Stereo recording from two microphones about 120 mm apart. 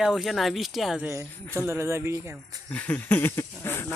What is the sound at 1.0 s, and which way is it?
Speech, 20° right (ahead or behind).